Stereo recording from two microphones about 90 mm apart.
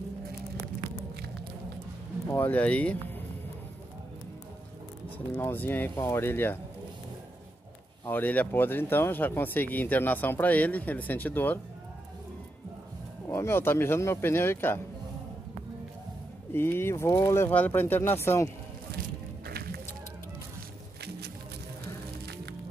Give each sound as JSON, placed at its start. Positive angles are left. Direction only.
{"t": 2.3, "sound": "speech", "side_deg": 20}
{"t": 5.3, "sound": "speech", "side_deg": 25}
{"t": 8.0, "sound": "speech", "side_deg": 20}
{"t": 13.3, "sound": "speech", "side_deg": 30}
{"t": 16.5, "sound": "speech", "side_deg": 25}